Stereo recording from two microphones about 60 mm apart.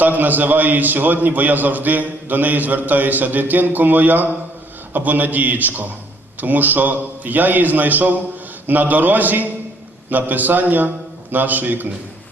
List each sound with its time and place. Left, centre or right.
0.0 s a man's voice: right